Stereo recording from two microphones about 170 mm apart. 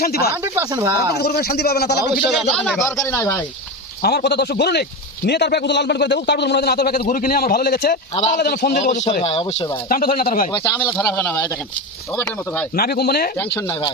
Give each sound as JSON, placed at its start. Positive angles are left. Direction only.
{"t": 0.0, "sound": "speech", "side_deg": 65}
{"t": 0.4, "sound": "speech", "side_deg": -15}
{"t": 1.2, "sound": "a man's voice", "side_deg": 70}
{"t": 2.2, "sound": "speech", "side_deg": 0}
{"t": 3.2, "sound": "speech", "side_deg": 15}
{"t": 4.0, "sound": "a man's voice", "side_deg": 70}
{"t": 9.9, "sound": "speech", "side_deg": 55}
{"t": 10.5, "sound": "speech", "side_deg": 25}
{"t": 10.9, "sound": "speech", "side_deg": 15}
{"t": 12.7, "sound": "speech", "side_deg": 65}
{"t": 13.6, "sound": "speech", "side_deg": 25}